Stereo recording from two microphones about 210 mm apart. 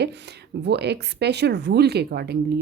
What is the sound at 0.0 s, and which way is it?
Speech, 55° right (ahead or behind).